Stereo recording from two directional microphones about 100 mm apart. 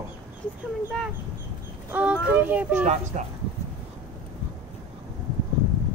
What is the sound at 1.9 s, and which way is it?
Speech, 15° right (ahead or behind).